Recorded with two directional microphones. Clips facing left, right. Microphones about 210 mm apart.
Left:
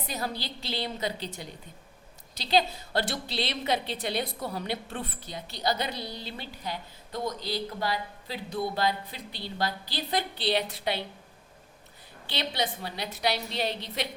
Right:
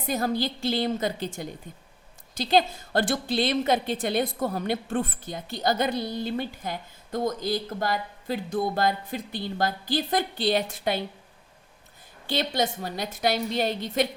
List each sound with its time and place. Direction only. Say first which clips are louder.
0.1 s a woman's voice: right 9 dB; 50° right (ahead or behind)
12.2 s a woman's voice: right 5 dB; 45° right (ahead or behind)